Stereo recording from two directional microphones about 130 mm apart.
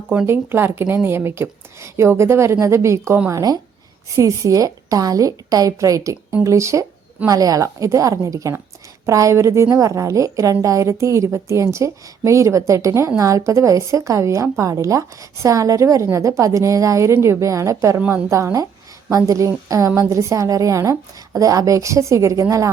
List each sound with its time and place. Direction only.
0.1 s a woman's voice: 15° right (ahead or behind)